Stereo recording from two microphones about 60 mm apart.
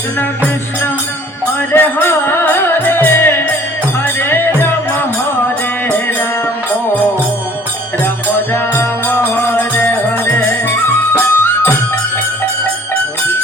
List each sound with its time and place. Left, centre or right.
1.7 s music: left
8.5 s music: left
9.6 s music: left